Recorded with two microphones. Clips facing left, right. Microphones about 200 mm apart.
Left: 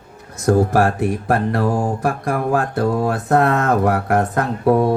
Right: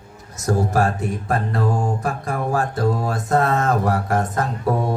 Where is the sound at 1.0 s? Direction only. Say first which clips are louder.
Left 5 dB; 75° left (ahead or behind).